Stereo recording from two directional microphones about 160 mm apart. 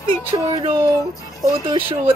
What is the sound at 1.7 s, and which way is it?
Speech, 30° right (ahead or behind).